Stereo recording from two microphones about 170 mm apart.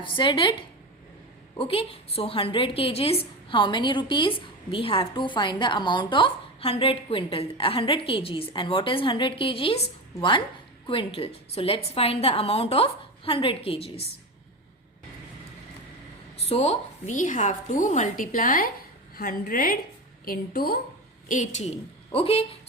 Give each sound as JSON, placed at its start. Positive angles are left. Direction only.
{"t": 0.0, "sound": "speech", "side_deg": 30}
{"t": 1.5, "sound": "a woman's voice", "side_deg": 35}
{"t": 16.5, "sound": "a woman's voice", "side_deg": 40}
{"t": 21.2, "sound": "a woman's voice", "side_deg": 45}